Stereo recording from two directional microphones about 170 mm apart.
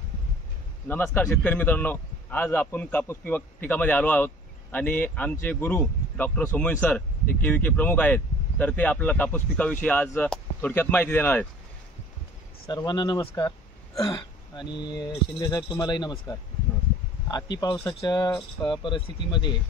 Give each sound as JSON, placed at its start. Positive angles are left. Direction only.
{"t": 0.8, "sound": "a man's voice", "side_deg": 10}
{"t": 12.6, "sound": "speech", "side_deg": 25}